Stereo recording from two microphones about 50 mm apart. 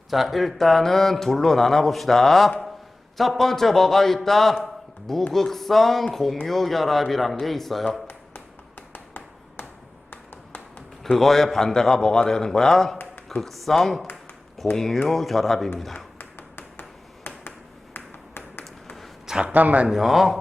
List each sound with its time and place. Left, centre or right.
0.1 s speech: centre
4.6 s a sound: centre
5.3 s speech: centre
8.9 s finger snapping: left
10.1 s a sound: left
11.0 s a man's voice: centre
16.1 s tap: left
17.9 s tap: left
19.3 s a man's voice: centre
19.5 s a man's voice: right
19.9 s speech: centre